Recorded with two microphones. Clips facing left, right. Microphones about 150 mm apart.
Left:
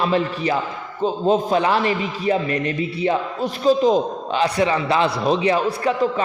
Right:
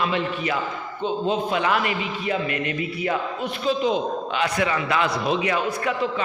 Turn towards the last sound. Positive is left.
turn(degrees=30)  # may be behind; listen again after turning